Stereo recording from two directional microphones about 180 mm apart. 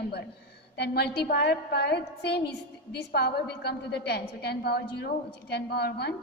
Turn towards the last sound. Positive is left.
turn(degrees=65)  # may be behind; listen again after turning